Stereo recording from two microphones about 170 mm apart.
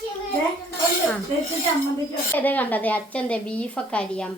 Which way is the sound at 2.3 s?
10° left (ahead or behind).